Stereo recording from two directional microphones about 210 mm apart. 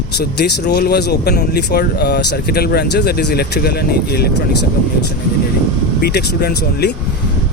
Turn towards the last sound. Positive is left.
turn(degrees=50)  # may be behind; listen again after turning